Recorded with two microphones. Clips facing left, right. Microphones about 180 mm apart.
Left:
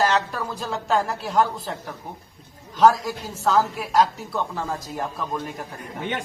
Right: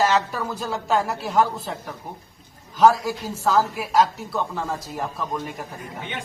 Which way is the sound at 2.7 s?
10° right (ahead or behind).